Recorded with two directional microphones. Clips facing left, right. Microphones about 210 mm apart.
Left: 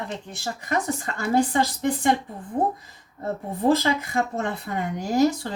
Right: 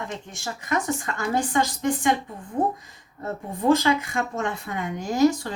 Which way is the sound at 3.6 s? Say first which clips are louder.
Right 1 dB; 35° left (ahead or behind).